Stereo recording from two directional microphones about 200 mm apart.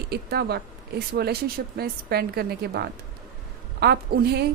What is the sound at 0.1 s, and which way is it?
A woman's voice, 55° right (ahead or behind).